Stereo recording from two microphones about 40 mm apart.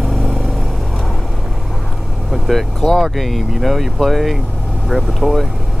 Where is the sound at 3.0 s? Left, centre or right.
Centre.